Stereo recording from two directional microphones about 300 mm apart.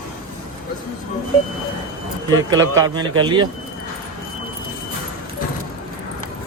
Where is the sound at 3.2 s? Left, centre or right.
Centre.